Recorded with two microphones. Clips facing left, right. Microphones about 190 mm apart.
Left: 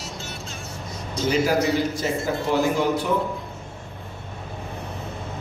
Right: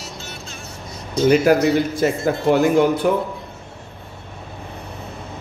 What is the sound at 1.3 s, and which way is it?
Speech, 60° right (ahead or behind).